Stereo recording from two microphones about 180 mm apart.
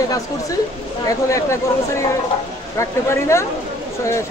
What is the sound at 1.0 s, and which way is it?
Speech, 15° left (ahead or behind).